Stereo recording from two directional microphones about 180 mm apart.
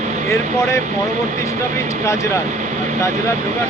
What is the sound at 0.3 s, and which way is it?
Speech, 15° left (ahead or behind).